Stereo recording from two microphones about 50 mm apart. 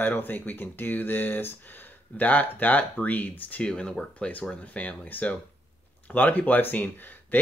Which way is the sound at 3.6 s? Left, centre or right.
Centre.